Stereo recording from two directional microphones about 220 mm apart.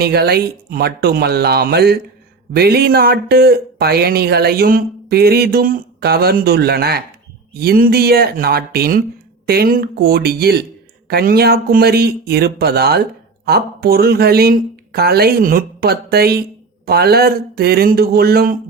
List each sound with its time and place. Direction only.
0.0 s speech: 45° right (ahead or behind)